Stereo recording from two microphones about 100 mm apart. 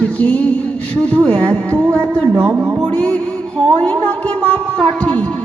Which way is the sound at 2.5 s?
25° right (ahead or behind).